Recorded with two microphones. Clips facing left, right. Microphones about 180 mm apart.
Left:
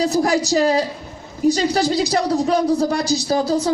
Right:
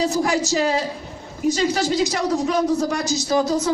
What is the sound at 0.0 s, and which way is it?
Speech, 35° left (ahead or behind).